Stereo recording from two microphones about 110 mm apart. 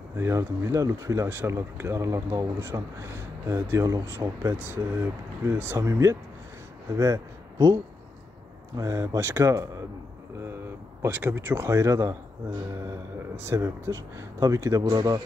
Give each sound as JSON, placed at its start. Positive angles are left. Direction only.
{"t": 0.2, "sound": "a man's voice", "side_deg": -25}
{"t": 11.0, "sound": "speech", "side_deg": -20}
{"t": 13.5, "sound": "speech", "side_deg": -25}